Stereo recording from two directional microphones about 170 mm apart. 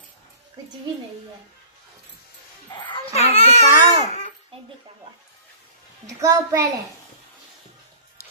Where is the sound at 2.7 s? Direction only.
30° left (ahead or behind).